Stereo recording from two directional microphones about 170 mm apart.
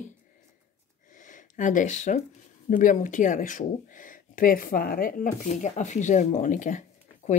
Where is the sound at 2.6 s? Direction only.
50° left (ahead or behind).